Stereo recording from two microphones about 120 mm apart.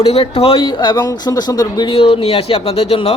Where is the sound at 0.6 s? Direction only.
40° left (ahead or behind).